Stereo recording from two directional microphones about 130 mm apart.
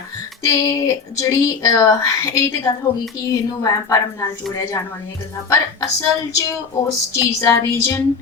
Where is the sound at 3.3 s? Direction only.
25° left (ahead or behind).